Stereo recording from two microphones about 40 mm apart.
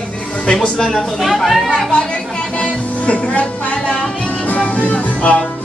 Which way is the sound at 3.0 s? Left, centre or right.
Left.